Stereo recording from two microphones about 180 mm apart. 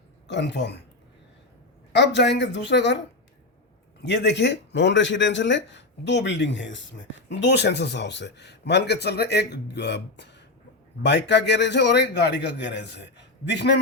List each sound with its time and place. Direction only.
0.3 s speech: 70° left (ahead or behind)
1.9 s speech: 70° left (ahead or behind)
4.0 s speech: 75° left (ahead or behind)